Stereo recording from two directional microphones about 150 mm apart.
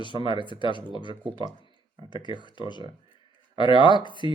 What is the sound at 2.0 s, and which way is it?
Speech, 30° left (ahead or behind).